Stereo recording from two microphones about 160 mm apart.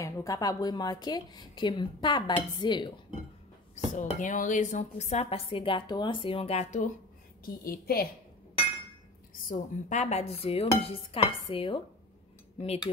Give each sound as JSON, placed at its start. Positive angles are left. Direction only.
{"t": 0.0, "sound": "a woman's voice", "side_deg": 20}
{"t": 3.7, "sound": "speech", "side_deg": 50}
{"t": 7.4, "sound": "a woman's voice", "side_deg": 65}
{"t": 9.5, "sound": "dishes", "side_deg": 50}
{"t": 12.5, "sound": "cutlery", "side_deg": 40}